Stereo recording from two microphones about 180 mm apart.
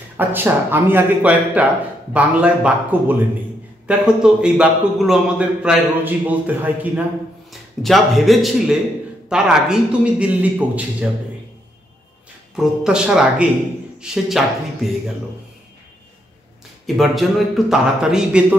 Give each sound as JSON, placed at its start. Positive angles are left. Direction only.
{"t": 0.2, "sound": "a man's voice", "side_deg": -10}
{"t": 12.5, "sound": "speech", "side_deg": -5}
{"t": 16.8, "sound": "speech", "side_deg": 0}